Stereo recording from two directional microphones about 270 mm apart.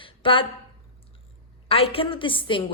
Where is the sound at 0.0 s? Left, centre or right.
Centre.